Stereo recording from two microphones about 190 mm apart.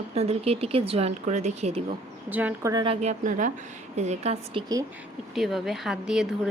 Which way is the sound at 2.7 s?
30° right (ahead or behind).